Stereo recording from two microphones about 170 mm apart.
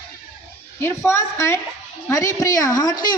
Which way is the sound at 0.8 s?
15° left (ahead or behind).